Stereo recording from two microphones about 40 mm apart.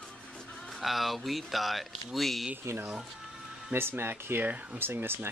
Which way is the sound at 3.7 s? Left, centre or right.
Right.